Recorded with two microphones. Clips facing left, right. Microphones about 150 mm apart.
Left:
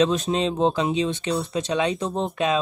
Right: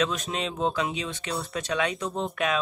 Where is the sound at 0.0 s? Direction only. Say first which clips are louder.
Left 7 dB; 25° left (ahead or behind).